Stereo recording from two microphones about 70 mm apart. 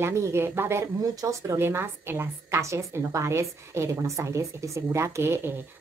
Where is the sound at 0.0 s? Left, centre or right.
Right.